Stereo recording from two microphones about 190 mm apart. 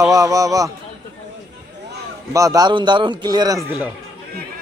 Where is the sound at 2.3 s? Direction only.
20° right (ahead or behind).